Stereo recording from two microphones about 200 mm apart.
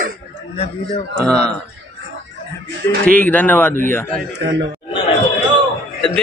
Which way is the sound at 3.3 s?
10° left (ahead or behind).